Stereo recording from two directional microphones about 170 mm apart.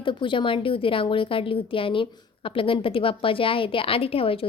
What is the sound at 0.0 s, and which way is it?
A woman's voice, 30° left (ahead or behind).